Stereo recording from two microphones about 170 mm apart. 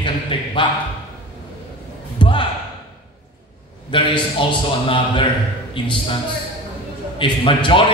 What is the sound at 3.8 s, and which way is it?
A man's voice, 30° left (ahead or behind).